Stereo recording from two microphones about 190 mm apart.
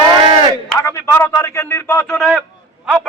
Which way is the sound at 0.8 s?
10° left (ahead or behind).